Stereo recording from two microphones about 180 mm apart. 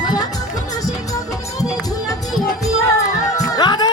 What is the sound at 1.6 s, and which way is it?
Music, 20° left (ahead or behind).